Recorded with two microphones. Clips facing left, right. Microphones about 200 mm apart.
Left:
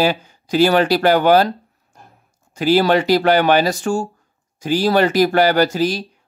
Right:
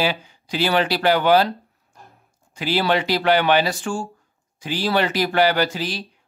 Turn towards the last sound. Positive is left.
turn(degrees=45)  # may be behind; listen again after turning